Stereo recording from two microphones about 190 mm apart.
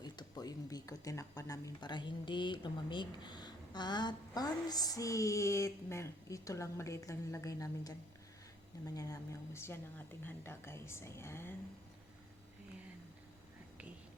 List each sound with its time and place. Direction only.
0.0 s a woman's voice: 20° left (ahead or behind)